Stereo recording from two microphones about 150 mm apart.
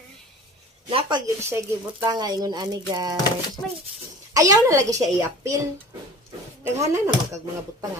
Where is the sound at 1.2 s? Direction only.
15° right (ahead or behind).